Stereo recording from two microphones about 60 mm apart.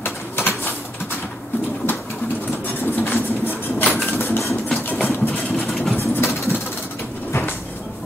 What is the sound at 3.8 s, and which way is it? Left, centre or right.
Dishes, centre.